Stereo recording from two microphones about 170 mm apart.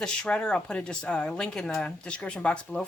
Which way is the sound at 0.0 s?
5° left (ahead or behind).